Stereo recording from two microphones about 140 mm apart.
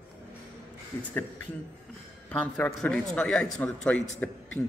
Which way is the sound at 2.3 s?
10° left (ahead or behind).